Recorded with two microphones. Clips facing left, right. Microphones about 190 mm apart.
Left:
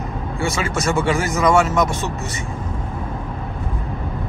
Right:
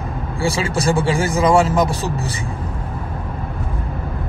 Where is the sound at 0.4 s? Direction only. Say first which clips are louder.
Right 2 dB; 30° right (ahead or behind).